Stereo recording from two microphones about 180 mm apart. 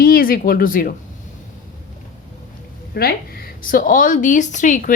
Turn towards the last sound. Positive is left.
turn(degrees=45)  # may be behind; listen again after turning